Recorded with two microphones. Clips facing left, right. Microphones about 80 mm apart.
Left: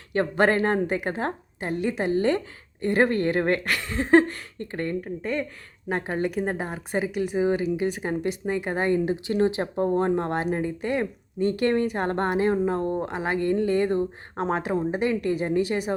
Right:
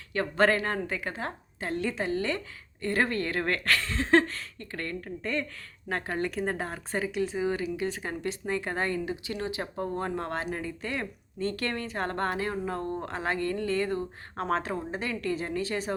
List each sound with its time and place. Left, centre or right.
0.1 s speech: left
9.0 s speech: left